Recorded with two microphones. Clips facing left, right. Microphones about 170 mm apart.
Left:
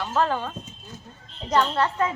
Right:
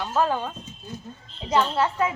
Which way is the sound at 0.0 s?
10° right (ahead or behind).